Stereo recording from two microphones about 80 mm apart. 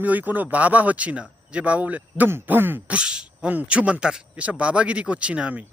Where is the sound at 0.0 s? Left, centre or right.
Right.